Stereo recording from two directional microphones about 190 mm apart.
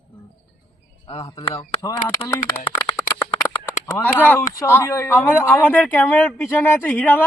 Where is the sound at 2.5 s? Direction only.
30° left (ahead or behind).